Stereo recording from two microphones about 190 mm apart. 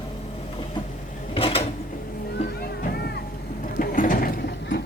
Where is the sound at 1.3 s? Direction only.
30° left (ahead or behind).